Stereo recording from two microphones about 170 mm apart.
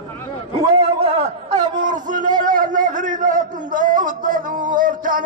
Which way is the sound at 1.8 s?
50° right (ahead or behind).